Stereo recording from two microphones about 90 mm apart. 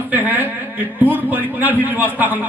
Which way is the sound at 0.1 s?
20° right (ahead or behind).